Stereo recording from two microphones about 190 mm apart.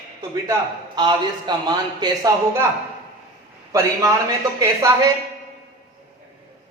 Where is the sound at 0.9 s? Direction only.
25° right (ahead or behind).